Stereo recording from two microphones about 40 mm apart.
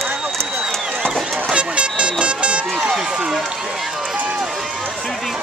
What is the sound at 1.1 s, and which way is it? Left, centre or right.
Run, centre.